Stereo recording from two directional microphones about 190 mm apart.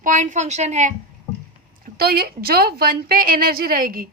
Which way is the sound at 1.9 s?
55° right (ahead or behind).